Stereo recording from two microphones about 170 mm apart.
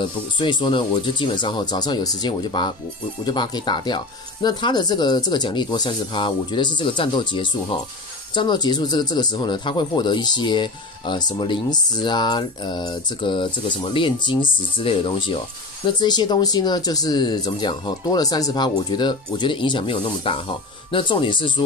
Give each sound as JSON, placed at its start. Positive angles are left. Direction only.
{"t": 0.0, "sound": "speech", "side_deg": 25}